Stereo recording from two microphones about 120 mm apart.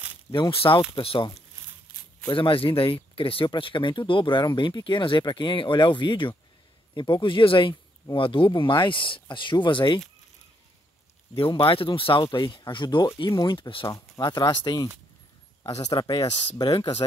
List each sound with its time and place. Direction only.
0.3 s speech: 45° left (ahead or behind)
2.3 s speech: 45° left (ahead or behind)
11.5 s speech: 45° left (ahead or behind)
13.8 s speech: 30° left (ahead or behind)
16.7 s speech: 45° left (ahead or behind)